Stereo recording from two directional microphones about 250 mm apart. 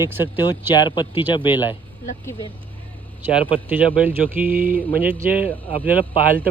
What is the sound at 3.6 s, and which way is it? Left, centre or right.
Speech, centre.